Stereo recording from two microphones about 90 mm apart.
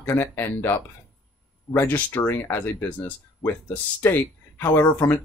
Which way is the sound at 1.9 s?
15° left (ahead or behind).